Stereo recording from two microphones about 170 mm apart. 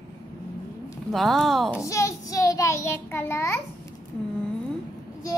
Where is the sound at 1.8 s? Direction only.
20° left (ahead or behind).